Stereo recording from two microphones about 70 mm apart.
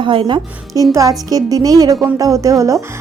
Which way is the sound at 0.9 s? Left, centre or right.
Right.